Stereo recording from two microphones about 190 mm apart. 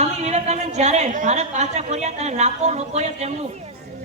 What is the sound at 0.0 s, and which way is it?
A woman's voice, 35° right (ahead or behind).